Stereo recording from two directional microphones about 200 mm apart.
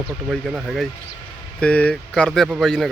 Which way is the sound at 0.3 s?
Centre (ahead or behind).